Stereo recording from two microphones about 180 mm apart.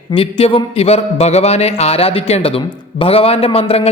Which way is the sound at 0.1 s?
30° left (ahead or behind).